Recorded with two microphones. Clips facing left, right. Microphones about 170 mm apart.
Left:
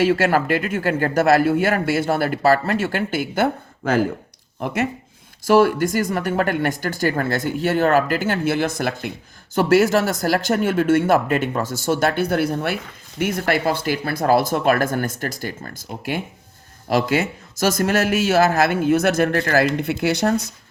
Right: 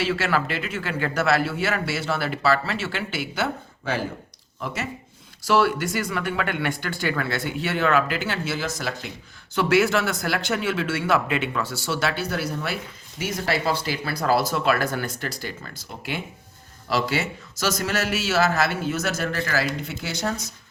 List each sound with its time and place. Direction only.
0.0 s a man's voice: 50° left (ahead or behind)
9.6 s a man's voice: 45° left (ahead or behind); by 20.5 s 60° left (ahead or behind)